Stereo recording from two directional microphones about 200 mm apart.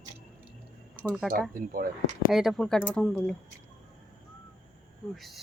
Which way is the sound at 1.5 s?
45° right (ahead or behind).